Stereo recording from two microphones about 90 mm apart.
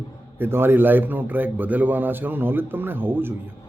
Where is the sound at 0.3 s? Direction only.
25° right (ahead or behind).